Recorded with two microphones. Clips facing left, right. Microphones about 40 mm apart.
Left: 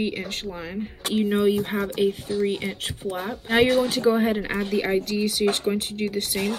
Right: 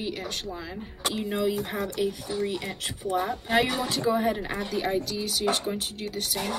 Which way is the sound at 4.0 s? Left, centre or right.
Left.